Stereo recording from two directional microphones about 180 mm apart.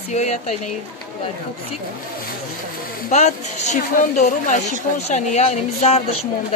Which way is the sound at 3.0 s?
40° left (ahead or behind).